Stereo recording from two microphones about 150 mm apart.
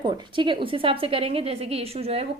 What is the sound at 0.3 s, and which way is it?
A woman's voice, 35° right (ahead or behind).